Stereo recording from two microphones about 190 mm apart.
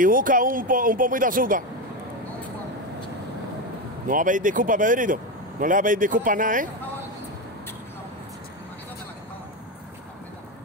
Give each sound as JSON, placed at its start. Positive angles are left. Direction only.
{"t": 0.0, "sound": "a man's voice", "side_deg": -45}
{"t": 4.1, "sound": "a man's voice", "side_deg": -45}